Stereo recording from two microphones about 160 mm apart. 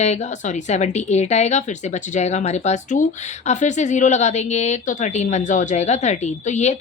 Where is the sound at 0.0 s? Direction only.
45° left (ahead or behind).